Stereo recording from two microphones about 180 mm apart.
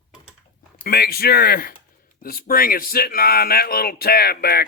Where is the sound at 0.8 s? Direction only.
60° left (ahead or behind).